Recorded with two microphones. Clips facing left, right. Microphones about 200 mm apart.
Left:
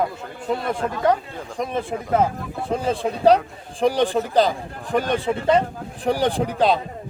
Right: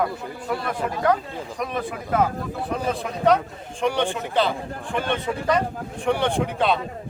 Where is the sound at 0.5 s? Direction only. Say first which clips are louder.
Left 3 dB; 25° left (ahead or behind).